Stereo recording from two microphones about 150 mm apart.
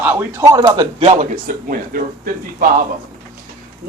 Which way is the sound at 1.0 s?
45° right (ahead or behind).